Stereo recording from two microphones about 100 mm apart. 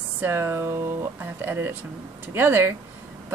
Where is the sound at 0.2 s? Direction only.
20° right (ahead or behind).